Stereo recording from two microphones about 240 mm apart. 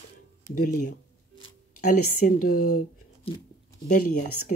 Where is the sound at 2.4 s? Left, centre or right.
Left.